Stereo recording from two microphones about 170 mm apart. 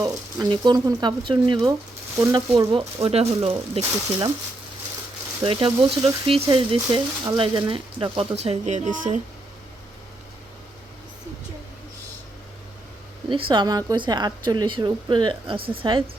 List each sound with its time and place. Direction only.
0.0 s a woman's voice: 25° right (ahead or behind)
2.1 s speech: 15° right (ahead or behind)
2.5 s speech: 30° right (ahead or behind)
5.4 s a woman's voice: 30° right (ahead or behind); by 9.2 s 45° right (ahead or behind)
13.3 s a woman's voice: 25° right (ahead or behind)